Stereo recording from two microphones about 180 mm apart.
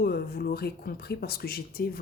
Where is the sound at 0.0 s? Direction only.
60° left (ahead or behind).